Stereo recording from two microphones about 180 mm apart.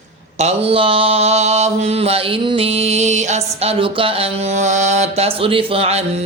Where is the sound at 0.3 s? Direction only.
35° right (ahead or behind).